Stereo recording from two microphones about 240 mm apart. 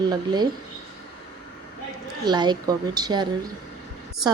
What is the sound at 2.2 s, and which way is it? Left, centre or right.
Speech, centre.